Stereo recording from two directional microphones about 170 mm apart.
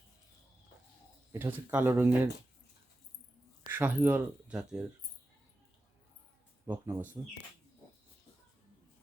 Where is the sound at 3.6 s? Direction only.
10° right (ahead or behind).